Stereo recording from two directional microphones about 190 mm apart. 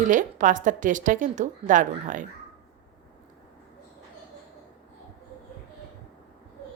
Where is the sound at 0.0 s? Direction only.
40° right (ahead or behind).